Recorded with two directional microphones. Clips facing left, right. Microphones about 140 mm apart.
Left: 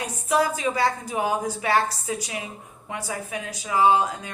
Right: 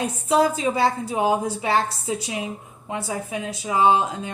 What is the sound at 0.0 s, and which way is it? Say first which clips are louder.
A woman's voice: right 4 dB; 25° right (ahead or behind).